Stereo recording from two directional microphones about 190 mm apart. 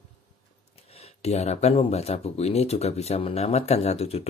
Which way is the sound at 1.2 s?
35° left (ahead or behind).